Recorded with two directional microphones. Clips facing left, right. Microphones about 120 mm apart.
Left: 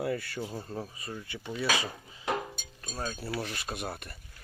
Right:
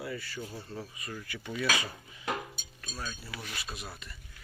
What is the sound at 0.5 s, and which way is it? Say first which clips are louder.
Speech: left 4 dB; 45° left (ahead or behind).